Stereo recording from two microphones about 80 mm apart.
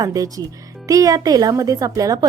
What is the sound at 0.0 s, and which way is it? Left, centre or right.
A woman's voice, right.